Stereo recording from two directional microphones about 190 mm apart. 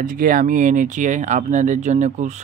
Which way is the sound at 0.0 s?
45° right (ahead or behind).